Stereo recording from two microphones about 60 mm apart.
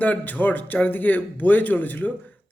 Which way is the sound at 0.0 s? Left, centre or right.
Left.